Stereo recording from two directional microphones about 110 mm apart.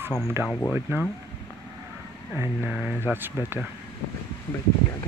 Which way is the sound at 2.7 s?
5° right (ahead or behind).